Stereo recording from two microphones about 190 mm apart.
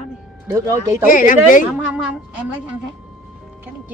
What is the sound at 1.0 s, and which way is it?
Speech, 45° left (ahead or behind).